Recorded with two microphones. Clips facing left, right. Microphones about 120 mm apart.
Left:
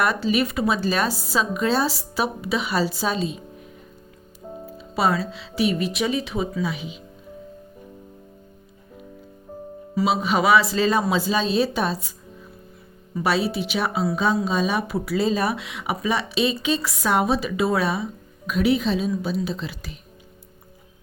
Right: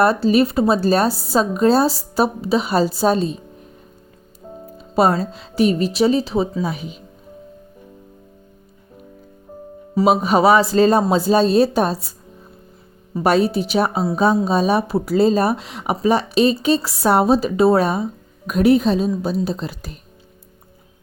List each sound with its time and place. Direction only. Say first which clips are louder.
0.0 s speech: right 7 dB; 35° right (ahead or behind)
4.8 s speech: right 6 dB; 45° right (ahead or behind)
9.9 s speech: right 6 dB; 45° right (ahead or behind)